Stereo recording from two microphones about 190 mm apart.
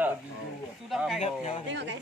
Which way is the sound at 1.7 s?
65° right (ahead or behind).